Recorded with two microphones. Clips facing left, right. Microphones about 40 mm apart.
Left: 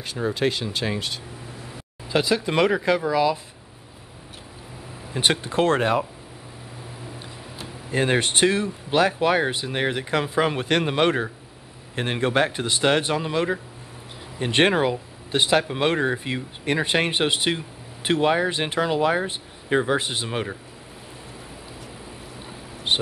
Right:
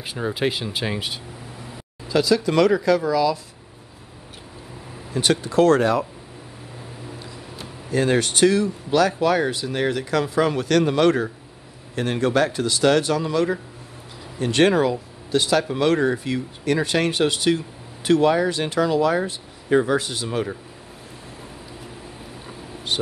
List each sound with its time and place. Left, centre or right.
0.0 s speech: centre
2.0 s speech: left
5.1 s speech: left
7.9 s speech: left
22.9 s speech: left